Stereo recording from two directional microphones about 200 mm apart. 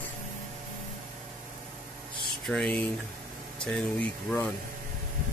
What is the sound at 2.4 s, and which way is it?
Speech, 5° left (ahead or behind).